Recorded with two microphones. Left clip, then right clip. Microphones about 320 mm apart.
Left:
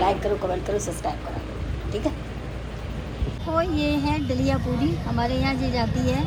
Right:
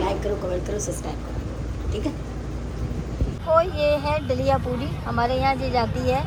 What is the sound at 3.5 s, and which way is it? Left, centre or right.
Speech, centre.